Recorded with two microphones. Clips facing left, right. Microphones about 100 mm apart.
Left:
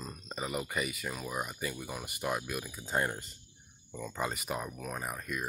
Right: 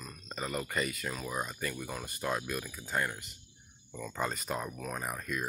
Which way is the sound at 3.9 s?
10° left (ahead or behind).